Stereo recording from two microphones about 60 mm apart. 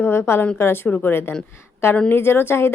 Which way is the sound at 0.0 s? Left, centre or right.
Left.